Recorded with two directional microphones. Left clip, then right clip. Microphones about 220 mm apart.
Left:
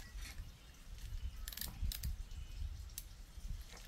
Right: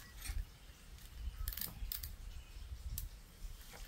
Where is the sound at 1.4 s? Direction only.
10° left (ahead or behind).